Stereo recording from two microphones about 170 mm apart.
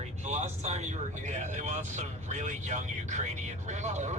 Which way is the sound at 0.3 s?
40° right (ahead or behind).